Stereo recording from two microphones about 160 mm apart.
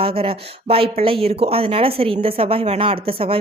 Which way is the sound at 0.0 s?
35° right (ahead or behind).